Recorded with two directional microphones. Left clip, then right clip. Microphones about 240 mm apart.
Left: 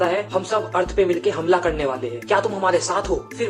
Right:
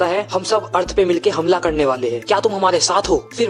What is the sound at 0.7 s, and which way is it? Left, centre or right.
Speech, right.